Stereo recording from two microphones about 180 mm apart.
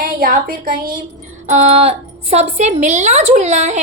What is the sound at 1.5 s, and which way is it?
A woman's voice, 40° right (ahead or behind).